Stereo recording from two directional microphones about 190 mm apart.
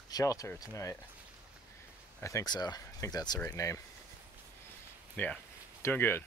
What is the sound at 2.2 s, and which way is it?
Speech, 15° left (ahead or behind).